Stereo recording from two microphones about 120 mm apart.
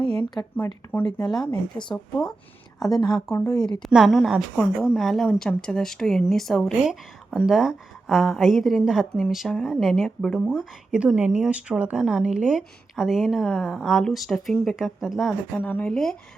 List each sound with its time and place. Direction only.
0.0 s a sound: 50° right (ahead or behind)
0.5 s speech: 15° left (ahead or behind)
2.8 s a woman's voice: 30° left (ahead or behind)
3.8 s speech: centre (ahead or behind)
15.5 s speech: 15° left (ahead or behind)